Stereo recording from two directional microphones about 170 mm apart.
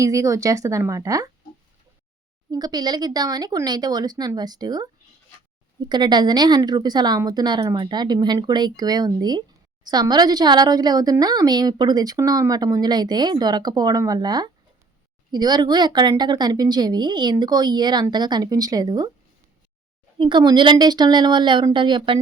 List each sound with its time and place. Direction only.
0.0 s a woman's voice: 20° right (ahead or behind)
2.5 s a woman's voice: 25° right (ahead or behind)
5.9 s a woman's voice: 25° right (ahead or behind)
20.1 s a woman's voice: 30° right (ahead or behind)